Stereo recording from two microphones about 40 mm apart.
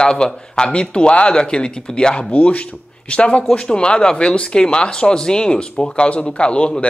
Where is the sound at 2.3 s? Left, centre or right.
Left.